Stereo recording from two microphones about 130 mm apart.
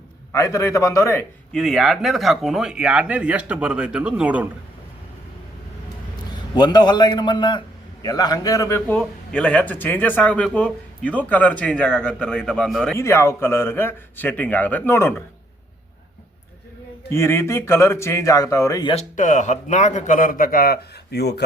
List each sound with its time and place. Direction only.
0.3 s speech: 25° left (ahead or behind)
1.5 s speech: centre (ahead or behind)
6.6 s a man's voice: 35° left (ahead or behind)
8.9 s speech: 5° left (ahead or behind)
12.9 s speech: 20° left (ahead or behind)
17.1 s speech: 20° left (ahead or behind)
19.1 s speech: 75° left (ahead or behind); by 20.7 s 90° left